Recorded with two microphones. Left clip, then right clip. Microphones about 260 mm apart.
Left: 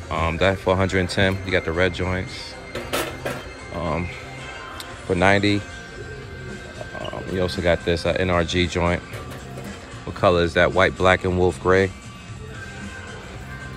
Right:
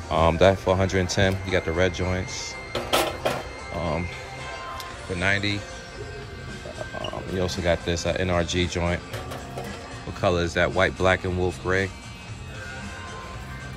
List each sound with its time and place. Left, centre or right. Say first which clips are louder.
0.1 s speech: right 2 dB; centre
2.7 s printer: right 3 dB; centre
5.1 s speech: left 7 dB; centre
7.3 s speech: left 4 dB; centre
10.2 s speech: left 5 dB; centre